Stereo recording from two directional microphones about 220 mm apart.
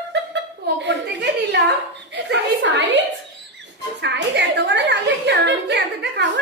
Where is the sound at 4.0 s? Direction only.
50° right (ahead or behind).